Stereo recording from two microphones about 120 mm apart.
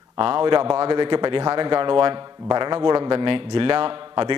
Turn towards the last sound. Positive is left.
turn(degrees=-45)  # may be behind; listen again after turning